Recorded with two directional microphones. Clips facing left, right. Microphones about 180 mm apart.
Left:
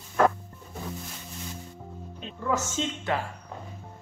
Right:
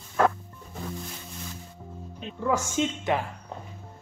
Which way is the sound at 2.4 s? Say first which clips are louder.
Right 3 dB; 15° right (ahead or behind).